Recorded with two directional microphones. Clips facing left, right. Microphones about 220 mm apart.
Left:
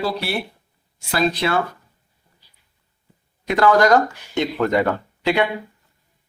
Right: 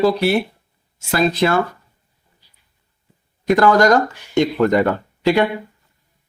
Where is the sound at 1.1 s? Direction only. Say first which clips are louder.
Right 4 dB; 45° right (ahead or behind).